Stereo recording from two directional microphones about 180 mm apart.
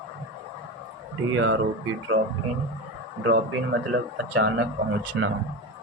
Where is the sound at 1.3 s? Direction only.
90° right.